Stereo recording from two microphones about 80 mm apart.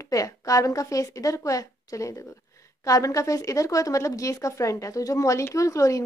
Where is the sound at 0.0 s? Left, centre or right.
Left.